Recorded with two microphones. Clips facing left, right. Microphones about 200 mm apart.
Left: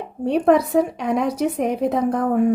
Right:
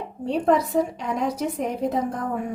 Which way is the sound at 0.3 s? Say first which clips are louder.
Left 5 dB; 65° left (ahead or behind).